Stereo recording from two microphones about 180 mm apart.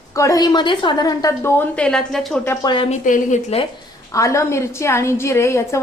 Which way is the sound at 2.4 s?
25° left (ahead or behind).